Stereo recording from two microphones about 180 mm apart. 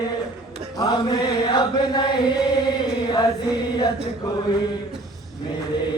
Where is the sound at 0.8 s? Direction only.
25° left (ahead or behind).